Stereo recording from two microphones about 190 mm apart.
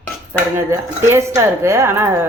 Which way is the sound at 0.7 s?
15° right (ahead or behind).